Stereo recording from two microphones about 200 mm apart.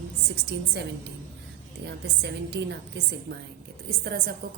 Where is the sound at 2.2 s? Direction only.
55° right (ahead or behind).